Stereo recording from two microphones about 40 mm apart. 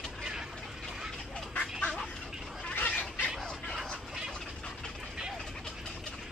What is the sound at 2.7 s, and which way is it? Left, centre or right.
Fowl, left.